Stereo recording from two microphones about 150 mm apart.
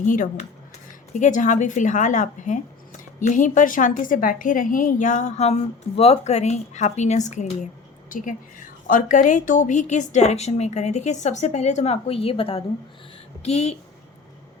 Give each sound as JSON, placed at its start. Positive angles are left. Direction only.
{"t": 0.0, "sound": "a woman's voice", "side_deg": 60}